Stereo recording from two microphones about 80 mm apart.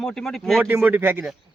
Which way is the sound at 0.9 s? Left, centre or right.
Right.